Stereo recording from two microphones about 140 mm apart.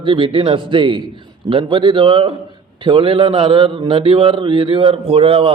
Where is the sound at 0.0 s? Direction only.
35° right (ahead or behind).